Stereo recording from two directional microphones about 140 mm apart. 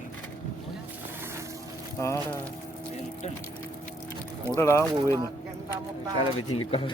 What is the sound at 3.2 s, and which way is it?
Speech, 55° left (ahead or behind).